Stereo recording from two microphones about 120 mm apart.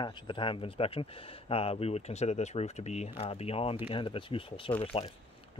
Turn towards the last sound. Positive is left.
turn(degrees=45)  # may be behind; listen again after turning